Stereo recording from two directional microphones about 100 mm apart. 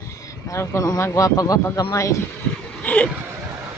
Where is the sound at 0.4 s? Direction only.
30° left (ahead or behind).